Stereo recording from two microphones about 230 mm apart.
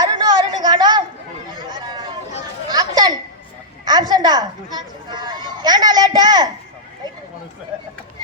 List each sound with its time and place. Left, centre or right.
0.0 s a sound: centre
1.5 s chatter: centre
2.6 s children playing: centre
3.8 s speech: centre